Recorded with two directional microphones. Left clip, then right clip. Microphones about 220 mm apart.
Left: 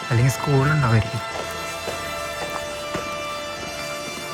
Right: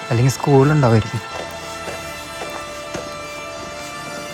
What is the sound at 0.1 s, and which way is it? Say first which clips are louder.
Speech: right 7 dB; 15° right (ahead or behind).